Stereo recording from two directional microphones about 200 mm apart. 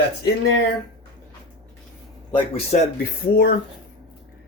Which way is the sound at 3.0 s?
50° left (ahead or behind).